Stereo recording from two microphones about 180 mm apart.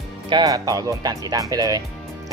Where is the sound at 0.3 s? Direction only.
20° right (ahead or behind).